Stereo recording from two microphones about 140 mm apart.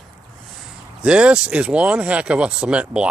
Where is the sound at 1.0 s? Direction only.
5° right (ahead or behind).